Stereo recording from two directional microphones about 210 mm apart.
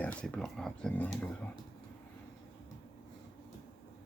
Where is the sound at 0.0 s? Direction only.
5° left (ahead or behind).